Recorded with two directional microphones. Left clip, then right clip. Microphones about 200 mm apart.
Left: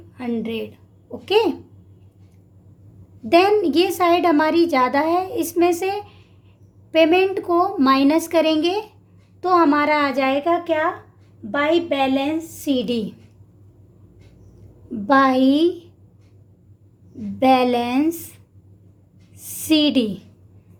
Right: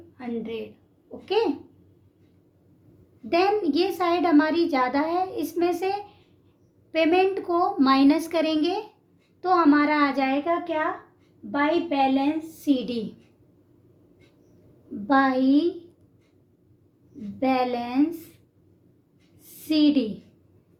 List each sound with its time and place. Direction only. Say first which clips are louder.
0.2 s a woman's voice: left 6 dB; 50° left (ahead or behind)
3.2 s a woman's voice: left 7 dB; 50° left (ahead or behind)
15.0 s a woman's voice: left 6 dB; 50° left (ahead or behind)
17.4 s a woman's voice: left 8 dB; 50° left (ahead or behind)
19.4 s a sound: left 5 dB; 50° left (ahead or behind)